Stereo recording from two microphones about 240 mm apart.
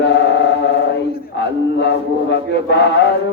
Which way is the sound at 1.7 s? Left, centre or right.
Left.